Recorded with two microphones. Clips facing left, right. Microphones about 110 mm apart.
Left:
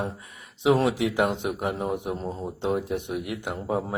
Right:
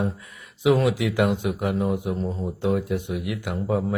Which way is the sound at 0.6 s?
35° left (ahead or behind).